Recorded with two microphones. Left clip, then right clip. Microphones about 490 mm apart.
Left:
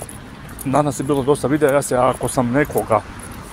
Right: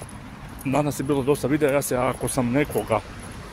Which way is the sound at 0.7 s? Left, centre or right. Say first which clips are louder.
Left 6 dB; right.